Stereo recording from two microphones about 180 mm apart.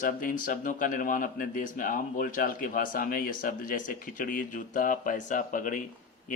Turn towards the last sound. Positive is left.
turn(degrees=45)  # may be behind; listen again after turning